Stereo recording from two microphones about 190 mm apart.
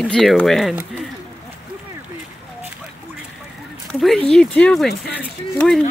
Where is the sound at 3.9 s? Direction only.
Centre (ahead or behind).